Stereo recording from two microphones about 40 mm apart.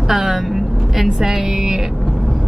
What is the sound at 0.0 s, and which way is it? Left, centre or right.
Vehicle, centre.